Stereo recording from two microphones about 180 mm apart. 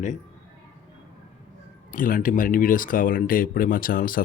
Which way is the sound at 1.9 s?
50° left (ahead or behind).